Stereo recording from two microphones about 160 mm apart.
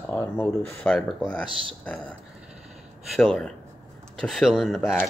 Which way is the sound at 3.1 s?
Centre (ahead or behind).